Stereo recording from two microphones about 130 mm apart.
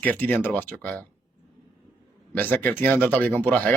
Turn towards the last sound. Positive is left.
turn(degrees=15)  # may be behind; listen again after turning